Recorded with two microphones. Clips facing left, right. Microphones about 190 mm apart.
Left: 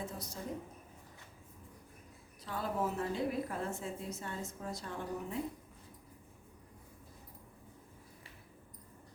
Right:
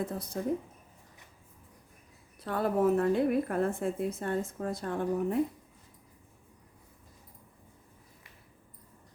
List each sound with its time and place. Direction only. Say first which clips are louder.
0.0 s a woman's voice: right 8 dB; 55° right (ahead or behind)
2.4 s a woman's voice: right 9 dB; 60° right (ahead or behind)